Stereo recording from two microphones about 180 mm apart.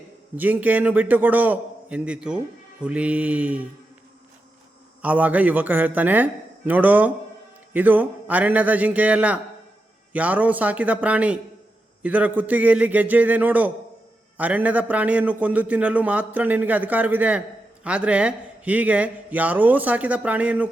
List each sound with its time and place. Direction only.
0.3 s a man's voice: 10° right (ahead or behind)
5.0 s a man's voice: 10° right (ahead or behind)